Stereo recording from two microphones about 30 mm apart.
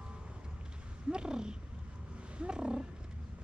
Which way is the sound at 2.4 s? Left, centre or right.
Right.